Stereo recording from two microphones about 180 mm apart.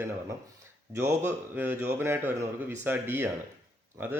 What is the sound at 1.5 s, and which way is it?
Speech, 10° right (ahead or behind).